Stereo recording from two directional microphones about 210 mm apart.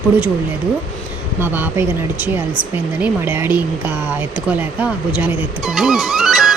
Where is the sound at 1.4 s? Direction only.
10° right (ahead or behind).